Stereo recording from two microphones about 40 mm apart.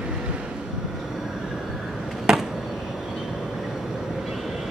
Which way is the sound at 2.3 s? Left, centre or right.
Centre.